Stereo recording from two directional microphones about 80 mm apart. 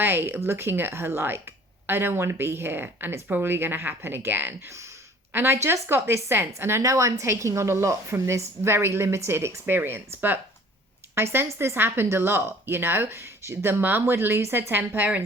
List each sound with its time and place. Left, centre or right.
0.0 s a woman's voice: right